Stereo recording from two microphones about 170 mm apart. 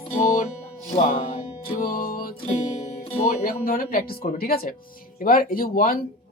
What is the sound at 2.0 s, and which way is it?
Music, 55° left (ahead or behind).